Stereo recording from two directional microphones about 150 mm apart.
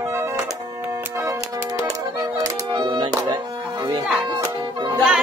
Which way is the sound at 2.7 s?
35° right (ahead or behind).